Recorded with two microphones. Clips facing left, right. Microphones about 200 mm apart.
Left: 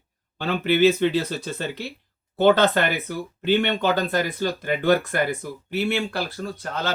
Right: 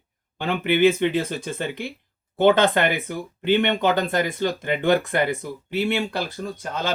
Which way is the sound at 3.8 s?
20° right (ahead or behind).